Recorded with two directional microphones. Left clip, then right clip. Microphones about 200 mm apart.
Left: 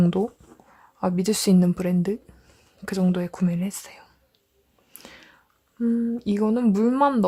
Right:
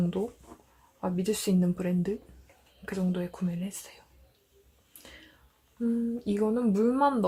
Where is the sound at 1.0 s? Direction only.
50° left (ahead or behind).